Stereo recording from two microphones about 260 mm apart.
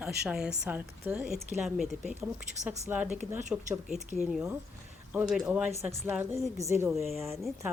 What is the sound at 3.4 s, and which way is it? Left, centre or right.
Speech, right.